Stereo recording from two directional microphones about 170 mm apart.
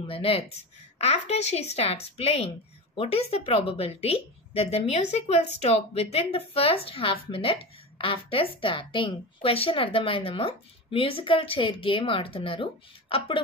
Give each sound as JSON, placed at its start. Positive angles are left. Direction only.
{"t": 0.0, "sound": "a woman's voice", "side_deg": 35}